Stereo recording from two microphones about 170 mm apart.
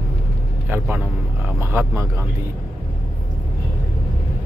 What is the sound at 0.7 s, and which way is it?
Speech, 10° right (ahead or behind).